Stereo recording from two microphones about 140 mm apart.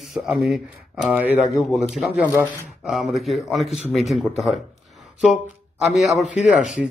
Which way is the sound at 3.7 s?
50° left (ahead or behind).